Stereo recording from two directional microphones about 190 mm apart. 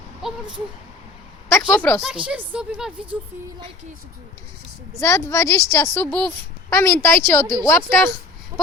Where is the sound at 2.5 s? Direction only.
5° right (ahead or behind).